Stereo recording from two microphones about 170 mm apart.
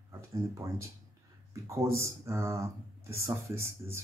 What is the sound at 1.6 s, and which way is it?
Speech, 15° right (ahead or behind).